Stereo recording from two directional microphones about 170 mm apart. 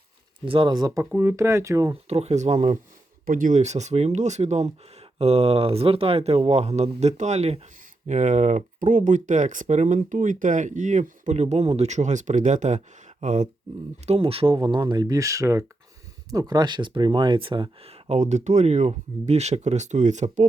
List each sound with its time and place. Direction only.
0.4 s speech: 30° right (ahead or behind)
1.9 s speech: 40° right (ahead or behind)
3.2 s speech: 55° right (ahead or behind)
14.1 s speech: 35° right (ahead or behind)